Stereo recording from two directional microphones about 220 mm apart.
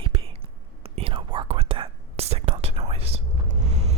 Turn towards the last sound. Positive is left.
turn(degrees=-30)  # may be behind; listen again after turning